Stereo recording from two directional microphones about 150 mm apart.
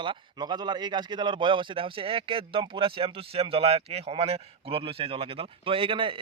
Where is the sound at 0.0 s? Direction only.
30° right (ahead or behind).